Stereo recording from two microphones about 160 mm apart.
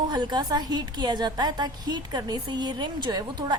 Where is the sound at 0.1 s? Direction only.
25° right (ahead or behind).